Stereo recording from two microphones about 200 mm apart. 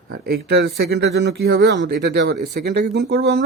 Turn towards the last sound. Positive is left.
turn(degrees=-55)  # may be behind; listen again after turning